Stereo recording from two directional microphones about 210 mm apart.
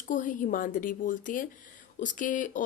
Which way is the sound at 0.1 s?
40° left (ahead or behind).